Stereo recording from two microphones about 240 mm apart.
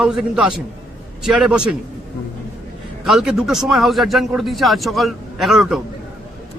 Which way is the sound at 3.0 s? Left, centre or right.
Centre.